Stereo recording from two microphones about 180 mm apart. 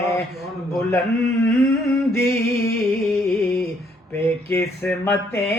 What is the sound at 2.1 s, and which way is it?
Music, 15° left (ahead or behind).